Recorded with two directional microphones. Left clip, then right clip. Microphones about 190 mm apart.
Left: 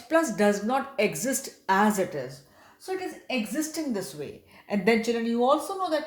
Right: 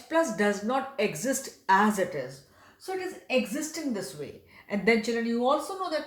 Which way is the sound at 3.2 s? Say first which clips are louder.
Right 5 dB; 30° left (ahead or behind).